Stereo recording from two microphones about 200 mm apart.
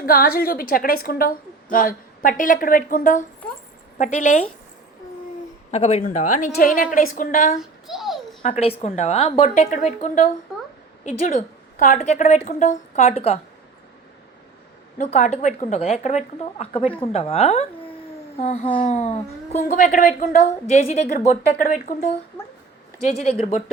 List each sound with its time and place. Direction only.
0.0 s a woman's voice: 45° left (ahead or behind)
5.7 s a woman's voice: 30° left (ahead or behind)
7.6 s a sound: centre (ahead or behind)
8.4 s a woman's voice: 30° left (ahead or behind)
14.9 s a woman's voice: 35° left (ahead or behind)
23.4 s a woman's voice: 35° left (ahead or behind)